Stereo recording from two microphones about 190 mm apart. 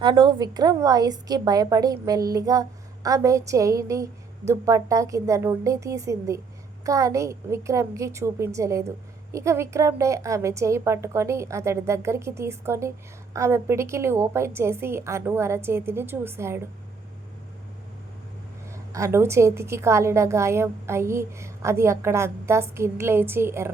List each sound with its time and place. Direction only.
0.0 s a woman's voice: 20° right (ahead or behind)
18.7 s a woman's voice: 15° right (ahead or behind)